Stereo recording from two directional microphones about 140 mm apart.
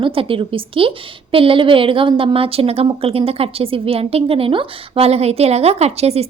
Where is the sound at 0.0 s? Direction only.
40° right (ahead or behind).